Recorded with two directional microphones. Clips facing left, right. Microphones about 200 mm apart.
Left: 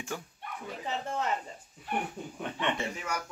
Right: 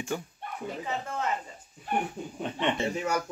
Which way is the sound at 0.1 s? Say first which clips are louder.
Right 6 dB; centre (ahead or behind).